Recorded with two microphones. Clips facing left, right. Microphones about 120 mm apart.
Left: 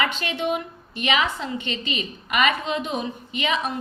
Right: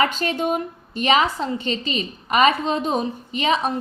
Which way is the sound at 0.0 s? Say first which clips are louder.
Right 4 dB; 40° right (ahead or behind).